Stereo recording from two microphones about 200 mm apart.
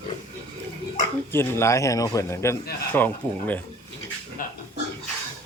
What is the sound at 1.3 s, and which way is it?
A man's voice, 10° left (ahead or behind).